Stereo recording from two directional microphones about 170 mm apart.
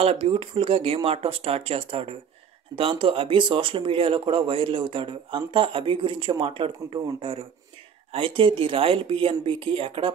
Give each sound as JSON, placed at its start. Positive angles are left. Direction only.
{"t": 0.0, "sound": "speech", "side_deg": -35}